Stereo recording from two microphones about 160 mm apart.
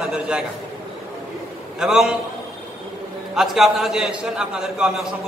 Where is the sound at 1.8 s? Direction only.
5° right (ahead or behind).